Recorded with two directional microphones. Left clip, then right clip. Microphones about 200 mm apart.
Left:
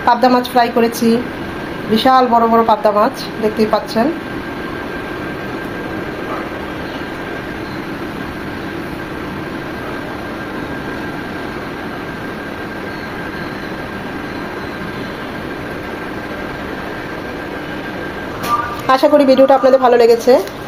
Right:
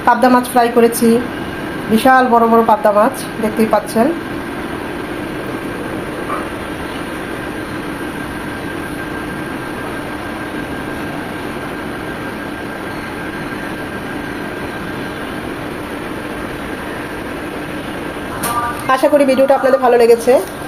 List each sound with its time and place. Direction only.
0.0 s a woman's voice: centre (ahead or behind)
2.0 s a woman's voice: centre (ahead or behind)
18.9 s a woman's voice: 15° left (ahead or behind)